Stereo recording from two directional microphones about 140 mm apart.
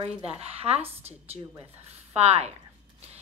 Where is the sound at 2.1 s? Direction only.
50° right (ahead or behind).